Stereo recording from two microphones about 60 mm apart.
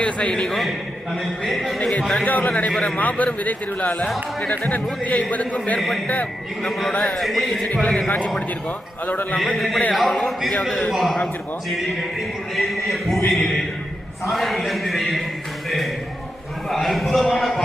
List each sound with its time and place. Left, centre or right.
0.0 s a man's voice: centre
1.5 s a man's voice: centre
2.2 s speech: left
6.7 s a man's voice: centre
7.7 s a man's voice: centre
9.0 s a man's voice: left
9.6 s speech: centre
12.5 s speech: centre
16.6 s speech: centre